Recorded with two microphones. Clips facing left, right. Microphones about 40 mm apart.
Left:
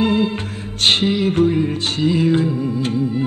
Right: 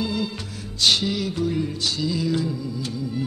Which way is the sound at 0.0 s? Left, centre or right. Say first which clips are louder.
Left 9 dB; left.